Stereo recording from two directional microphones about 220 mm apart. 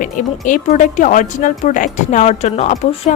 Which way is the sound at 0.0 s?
35° left (ahead or behind).